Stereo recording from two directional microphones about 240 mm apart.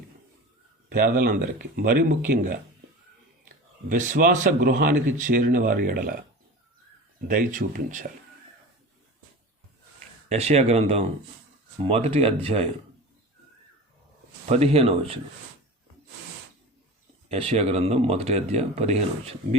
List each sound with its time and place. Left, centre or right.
0.9 s speech: right
3.8 s speech: right
7.3 s speech: right
10.2 s speech: right
14.4 s speech: right
17.2 s speech: right